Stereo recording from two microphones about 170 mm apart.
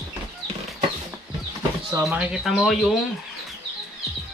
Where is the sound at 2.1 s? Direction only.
5° right (ahead or behind).